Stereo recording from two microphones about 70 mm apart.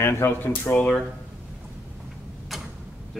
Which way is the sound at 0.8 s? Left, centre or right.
Centre.